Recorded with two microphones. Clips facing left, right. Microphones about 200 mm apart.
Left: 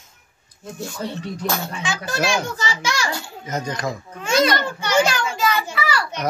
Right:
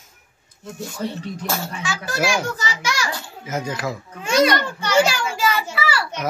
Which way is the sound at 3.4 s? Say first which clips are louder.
Even; 5° right (ahead or behind).